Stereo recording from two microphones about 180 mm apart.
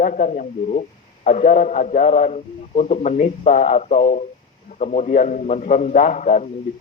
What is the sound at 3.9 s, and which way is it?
A man's voice, 35° left (ahead or behind).